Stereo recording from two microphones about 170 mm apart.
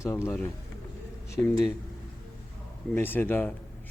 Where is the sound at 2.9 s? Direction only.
10° left (ahead or behind).